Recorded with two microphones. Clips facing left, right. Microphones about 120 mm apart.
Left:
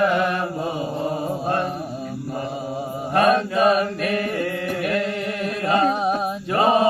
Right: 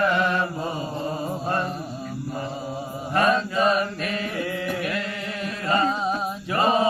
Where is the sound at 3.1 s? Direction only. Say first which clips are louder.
Left 3 dB; 70° left (ahead or behind).